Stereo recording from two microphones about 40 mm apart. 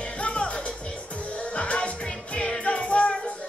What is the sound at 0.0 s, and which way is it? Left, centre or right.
Music, left.